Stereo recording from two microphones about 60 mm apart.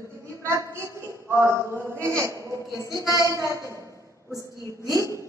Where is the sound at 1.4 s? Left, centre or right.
Right.